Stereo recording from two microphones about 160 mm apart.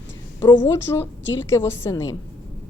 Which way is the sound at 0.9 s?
15° left (ahead or behind).